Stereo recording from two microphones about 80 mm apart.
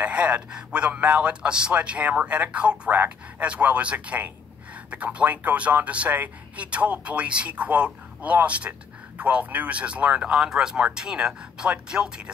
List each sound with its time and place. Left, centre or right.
0.0 s a man's voice: centre